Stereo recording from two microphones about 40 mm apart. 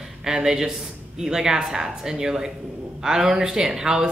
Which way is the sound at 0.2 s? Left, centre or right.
Centre.